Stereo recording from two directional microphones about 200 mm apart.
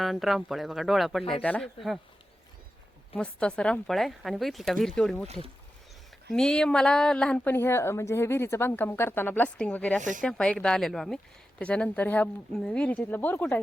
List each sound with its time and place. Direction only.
0.0 s speech: centre (ahead or behind)
3.2 s speech: 5° left (ahead or behind)
6.3 s a woman's voice: 5° left (ahead or behind)
10.0 s speech: 40° right (ahead or behind)
10.2 s a woman's voice: 5° left (ahead or behind)